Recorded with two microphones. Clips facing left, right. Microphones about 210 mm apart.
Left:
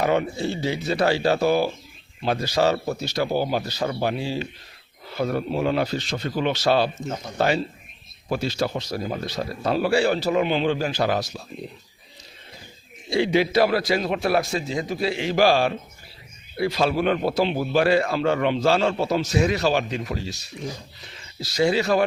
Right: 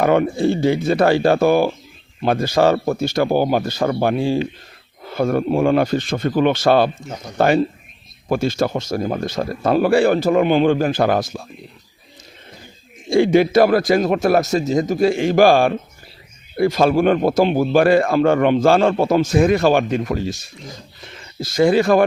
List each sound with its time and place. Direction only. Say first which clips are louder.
0.0 s speech: right 7 dB; 55° right (ahead or behind)
13.1 s speech: right 7 dB; 50° right (ahead or behind)